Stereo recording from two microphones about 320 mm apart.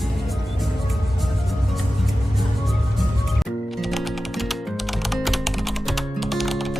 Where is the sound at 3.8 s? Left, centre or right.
Centre.